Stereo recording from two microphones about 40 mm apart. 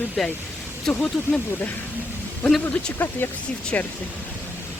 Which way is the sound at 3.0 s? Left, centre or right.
Left.